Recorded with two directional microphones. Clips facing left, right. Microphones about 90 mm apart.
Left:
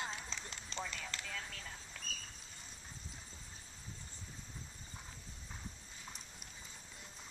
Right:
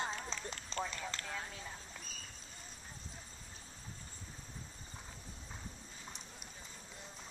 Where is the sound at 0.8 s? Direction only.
20° right (ahead or behind).